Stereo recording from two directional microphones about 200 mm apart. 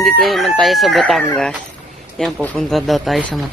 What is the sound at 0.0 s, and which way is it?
Speech, centre (ahead or behind).